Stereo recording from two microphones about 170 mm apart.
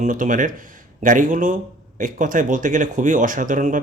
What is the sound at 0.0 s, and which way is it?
Speech, 50° right (ahead or behind).